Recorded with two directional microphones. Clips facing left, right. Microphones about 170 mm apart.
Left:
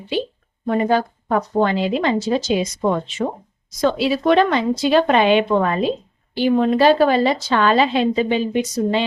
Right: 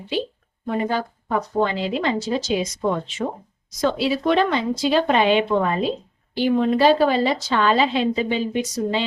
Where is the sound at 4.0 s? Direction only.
65° left (ahead or behind).